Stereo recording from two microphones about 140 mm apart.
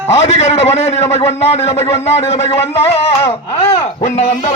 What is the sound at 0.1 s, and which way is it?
A man's voice, 50° left (ahead or behind).